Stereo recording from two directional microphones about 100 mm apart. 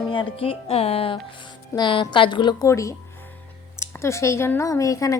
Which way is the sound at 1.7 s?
50° left (ahead or behind).